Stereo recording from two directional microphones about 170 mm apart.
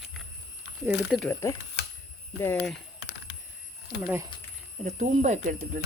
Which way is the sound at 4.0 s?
10° right (ahead or behind).